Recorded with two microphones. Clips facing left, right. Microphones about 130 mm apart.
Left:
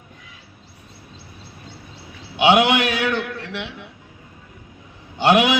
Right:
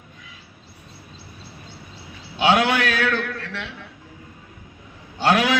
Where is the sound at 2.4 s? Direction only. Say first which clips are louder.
Left 3 dB; 20° left (ahead or behind).